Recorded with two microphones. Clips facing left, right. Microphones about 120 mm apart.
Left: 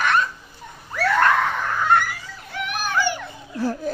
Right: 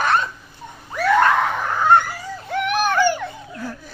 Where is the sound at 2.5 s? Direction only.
60° right (ahead or behind).